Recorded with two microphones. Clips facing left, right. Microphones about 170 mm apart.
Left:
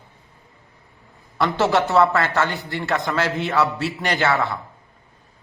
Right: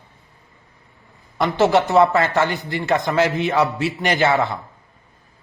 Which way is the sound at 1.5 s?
15° right (ahead or behind).